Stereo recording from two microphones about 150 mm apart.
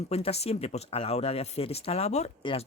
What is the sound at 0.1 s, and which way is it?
Speech, 45° left (ahead or behind).